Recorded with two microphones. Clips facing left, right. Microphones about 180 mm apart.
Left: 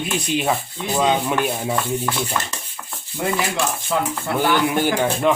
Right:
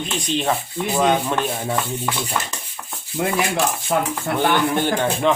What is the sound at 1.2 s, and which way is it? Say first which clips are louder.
Speech: left 1 dB; 5° left (ahead or behind).